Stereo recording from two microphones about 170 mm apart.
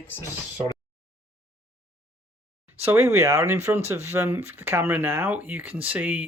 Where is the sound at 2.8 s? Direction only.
15° right (ahead or behind).